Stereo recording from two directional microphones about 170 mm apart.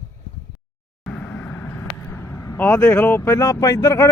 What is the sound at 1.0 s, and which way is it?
Vehicle, 5° left (ahead or behind).